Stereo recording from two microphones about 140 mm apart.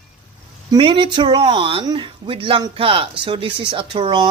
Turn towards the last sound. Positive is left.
turn(degrees=-30)  # may be behind; listen again after turning